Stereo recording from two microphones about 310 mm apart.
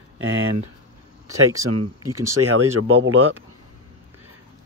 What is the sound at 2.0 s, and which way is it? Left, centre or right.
Speech, centre.